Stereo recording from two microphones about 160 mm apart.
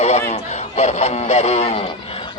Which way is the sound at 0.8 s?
45° left (ahead or behind).